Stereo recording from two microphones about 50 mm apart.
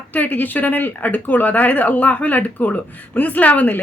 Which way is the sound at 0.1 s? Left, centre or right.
Left.